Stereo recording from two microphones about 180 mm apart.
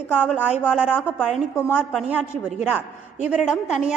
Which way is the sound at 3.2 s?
5° right (ahead or behind).